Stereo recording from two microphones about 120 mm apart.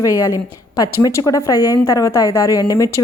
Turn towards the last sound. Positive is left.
turn(degrees=30)  # may be behind; listen again after turning